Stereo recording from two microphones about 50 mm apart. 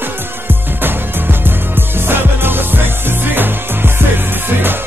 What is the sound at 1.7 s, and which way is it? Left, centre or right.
Music, right.